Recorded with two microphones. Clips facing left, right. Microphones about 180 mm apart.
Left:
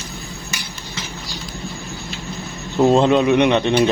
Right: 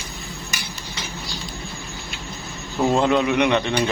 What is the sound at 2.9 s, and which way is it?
Speech, 20° left (ahead or behind).